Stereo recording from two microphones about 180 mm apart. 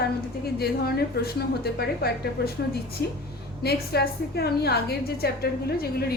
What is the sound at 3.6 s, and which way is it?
A woman's voice, 65° left (ahead or behind).